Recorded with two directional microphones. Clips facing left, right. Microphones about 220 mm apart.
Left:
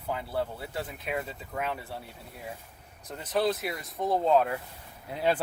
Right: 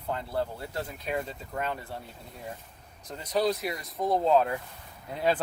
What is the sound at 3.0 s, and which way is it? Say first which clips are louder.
Speech: even; 5° left (ahead or behind).